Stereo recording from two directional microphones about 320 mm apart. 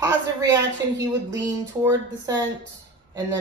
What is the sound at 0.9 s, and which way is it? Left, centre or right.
Speech, centre.